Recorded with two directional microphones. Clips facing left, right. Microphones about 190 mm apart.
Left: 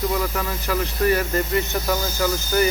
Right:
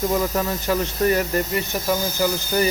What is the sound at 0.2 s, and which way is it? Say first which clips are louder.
Speech: right 3 dB; 25° right (ahead or behind).